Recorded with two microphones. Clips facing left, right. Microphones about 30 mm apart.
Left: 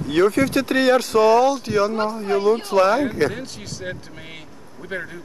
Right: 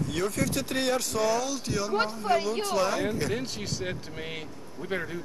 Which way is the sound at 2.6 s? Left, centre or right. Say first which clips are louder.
Left 9 dB; left.